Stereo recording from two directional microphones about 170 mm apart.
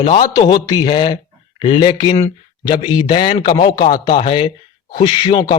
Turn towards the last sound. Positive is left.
turn(degrees=25)  # may be behind; listen again after turning